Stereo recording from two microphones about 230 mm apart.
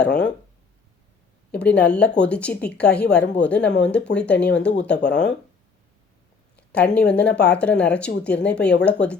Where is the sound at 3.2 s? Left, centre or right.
Left.